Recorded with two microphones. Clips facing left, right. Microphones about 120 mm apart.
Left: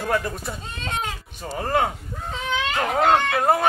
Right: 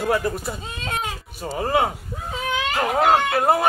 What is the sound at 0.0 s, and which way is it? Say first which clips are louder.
Speech: right 3 dB; 5° right (ahead or behind).